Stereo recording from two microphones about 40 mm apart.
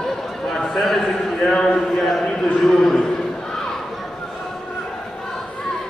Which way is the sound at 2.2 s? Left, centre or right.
Centre.